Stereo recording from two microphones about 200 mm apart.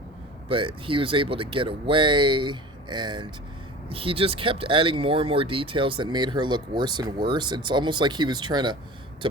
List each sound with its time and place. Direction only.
0.4 s speech: 25° right (ahead or behind)